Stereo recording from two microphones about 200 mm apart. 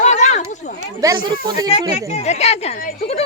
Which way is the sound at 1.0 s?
20° right (ahead or behind).